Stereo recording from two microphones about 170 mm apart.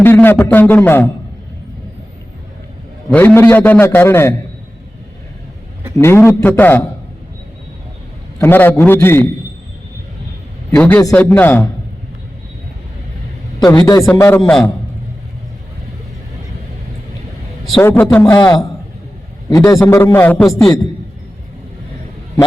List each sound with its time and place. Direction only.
0.0 s a man's voice: 10° left (ahead or behind)
3.1 s a man's voice: 10° left (ahead or behind)
6.0 s a man's voice: 15° left (ahead or behind)
8.4 s a man's voice: 10° left (ahead or behind)
10.7 s a man's voice: 10° left (ahead or behind)
13.7 s a man's voice: 20° left (ahead or behind)
17.8 s a man's voice: 10° left (ahead or behind)